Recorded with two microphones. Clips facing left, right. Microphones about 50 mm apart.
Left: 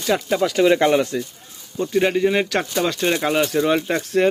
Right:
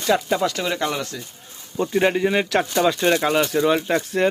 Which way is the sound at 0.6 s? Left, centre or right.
Left.